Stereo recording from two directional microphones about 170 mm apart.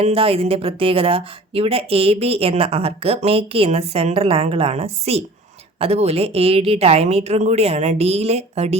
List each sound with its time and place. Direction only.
0.0 s speech: 35° right (ahead or behind)